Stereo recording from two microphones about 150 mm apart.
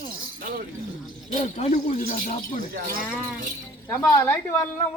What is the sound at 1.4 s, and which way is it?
Speech, 45° left (ahead or behind).